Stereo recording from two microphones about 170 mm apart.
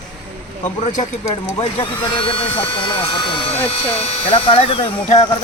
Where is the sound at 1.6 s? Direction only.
30° left (ahead or behind).